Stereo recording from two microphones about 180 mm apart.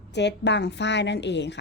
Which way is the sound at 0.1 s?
70° left (ahead or behind).